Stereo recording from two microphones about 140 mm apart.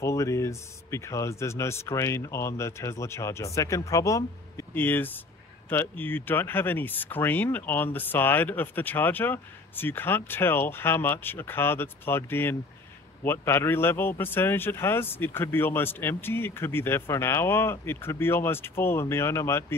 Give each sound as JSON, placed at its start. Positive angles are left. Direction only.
{"t": 0.0, "sound": "speech", "side_deg": 20}